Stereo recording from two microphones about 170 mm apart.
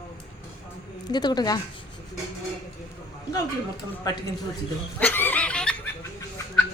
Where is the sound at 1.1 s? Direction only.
25° left (ahead or behind).